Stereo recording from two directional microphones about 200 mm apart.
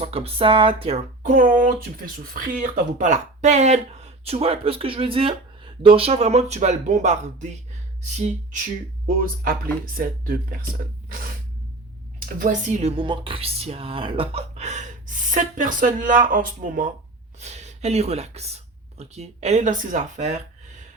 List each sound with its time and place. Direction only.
0.0 s speech: 30° right (ahead or behind); by 10.6 s 45° right (ahead or behind)
12.4 s speech: 40° right (ahead or behind)
13.0 s speech: 25° right (ahead or behind)